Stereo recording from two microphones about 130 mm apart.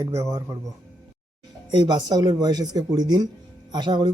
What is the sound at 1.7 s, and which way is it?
Speech, 35° right (ahead or behind).